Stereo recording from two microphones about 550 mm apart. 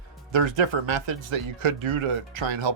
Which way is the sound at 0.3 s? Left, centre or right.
Right.